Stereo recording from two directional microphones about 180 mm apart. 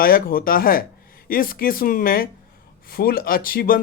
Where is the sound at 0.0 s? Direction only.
55° left (ahead or behind).